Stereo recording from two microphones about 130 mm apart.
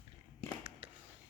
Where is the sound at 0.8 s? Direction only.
50° right (ahead or behind).